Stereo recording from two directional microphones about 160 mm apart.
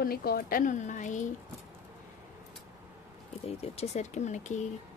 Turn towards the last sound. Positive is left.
turn(degrees=45)  # may be behind; listen again after turning